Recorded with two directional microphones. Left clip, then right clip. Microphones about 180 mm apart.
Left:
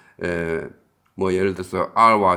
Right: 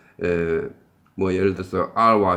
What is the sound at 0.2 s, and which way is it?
Speech, 40° left (ahead or behind).